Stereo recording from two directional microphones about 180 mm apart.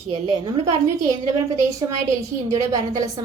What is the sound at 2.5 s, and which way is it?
Speech, 20° right (ahead or behind).